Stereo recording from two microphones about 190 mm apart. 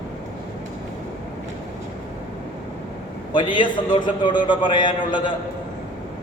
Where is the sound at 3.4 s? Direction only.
25° left (ahead or behind).